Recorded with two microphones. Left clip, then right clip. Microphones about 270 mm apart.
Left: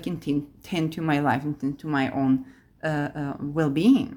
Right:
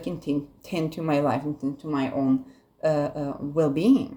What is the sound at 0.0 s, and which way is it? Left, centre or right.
A woman's voice, left.